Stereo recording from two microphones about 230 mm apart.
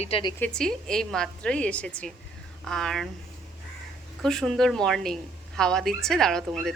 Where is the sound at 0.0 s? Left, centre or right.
Left.